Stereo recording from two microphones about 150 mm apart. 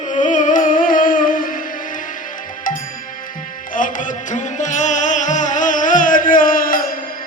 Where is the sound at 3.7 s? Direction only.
60° left (ahead or behind).